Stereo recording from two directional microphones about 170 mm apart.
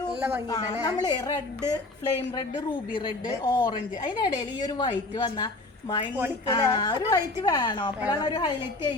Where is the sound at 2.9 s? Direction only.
25° left (ahead or behind).